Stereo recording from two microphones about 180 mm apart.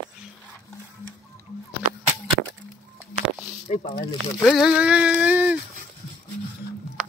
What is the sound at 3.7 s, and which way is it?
Speech, 40° left (ahead or behind).